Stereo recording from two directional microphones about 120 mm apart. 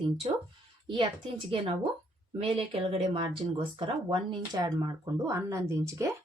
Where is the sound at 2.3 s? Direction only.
55° right (ahead or behind).